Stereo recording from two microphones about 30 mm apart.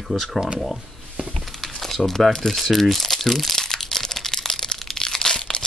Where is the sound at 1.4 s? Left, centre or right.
Centre.